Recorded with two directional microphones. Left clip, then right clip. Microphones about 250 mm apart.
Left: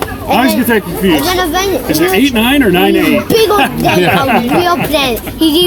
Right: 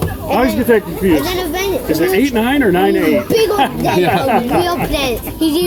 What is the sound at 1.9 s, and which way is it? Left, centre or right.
Speech, left.